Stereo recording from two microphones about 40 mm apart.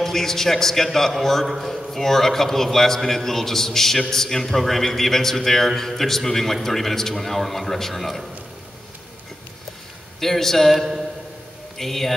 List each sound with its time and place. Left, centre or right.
0.0 s a man's voice: centre
10.2 s a man's voice: centre